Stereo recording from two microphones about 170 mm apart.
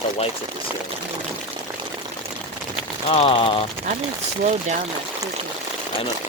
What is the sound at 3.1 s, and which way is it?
Speech, 35° left (ahead or behind).